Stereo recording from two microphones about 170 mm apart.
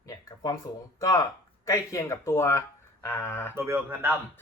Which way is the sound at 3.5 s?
15° right (ahead or behind).